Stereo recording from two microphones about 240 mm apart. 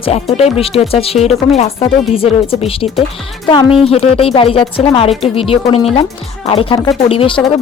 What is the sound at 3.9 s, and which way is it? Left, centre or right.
Speech, left.